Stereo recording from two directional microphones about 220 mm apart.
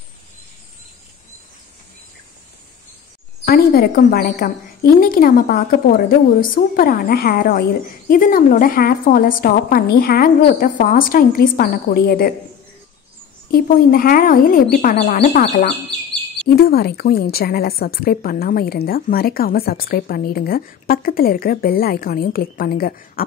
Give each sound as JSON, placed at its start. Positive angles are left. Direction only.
{"t": 3.4, "sound": "a woman's voice", "side_deg": 45}
{"t": 13.5, "sound": "a woman's voice", "side_deg": 40}